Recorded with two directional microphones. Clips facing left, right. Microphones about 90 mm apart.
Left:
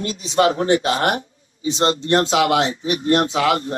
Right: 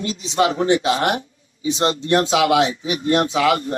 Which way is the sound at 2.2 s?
10° right (ahead or behind).